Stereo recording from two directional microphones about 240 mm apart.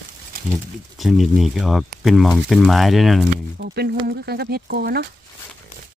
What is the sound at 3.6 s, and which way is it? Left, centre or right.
Speech, right.